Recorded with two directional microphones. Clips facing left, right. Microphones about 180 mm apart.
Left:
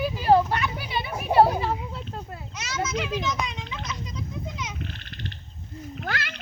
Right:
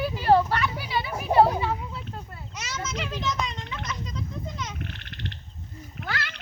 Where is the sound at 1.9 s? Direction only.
50° left (ahead or behind).